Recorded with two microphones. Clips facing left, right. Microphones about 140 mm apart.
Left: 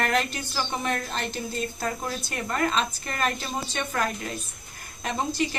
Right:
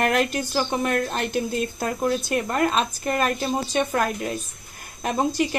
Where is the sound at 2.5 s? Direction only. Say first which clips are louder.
Right 1 dB; 45° right (ahead or behind).